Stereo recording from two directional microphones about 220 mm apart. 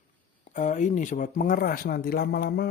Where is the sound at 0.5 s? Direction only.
35° left (ahead or behind).